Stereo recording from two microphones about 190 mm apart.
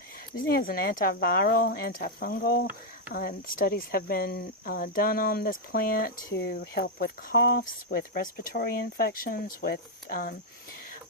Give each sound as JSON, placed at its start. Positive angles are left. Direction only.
{"t": 0.4, "sound": "speech", "side_deg": 50}